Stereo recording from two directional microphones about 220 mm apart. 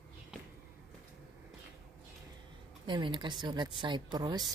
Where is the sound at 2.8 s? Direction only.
20° right (ahead or behind).